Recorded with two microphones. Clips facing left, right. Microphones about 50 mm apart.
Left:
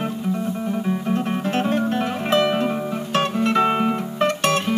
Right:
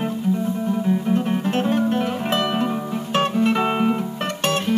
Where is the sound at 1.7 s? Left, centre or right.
Centre.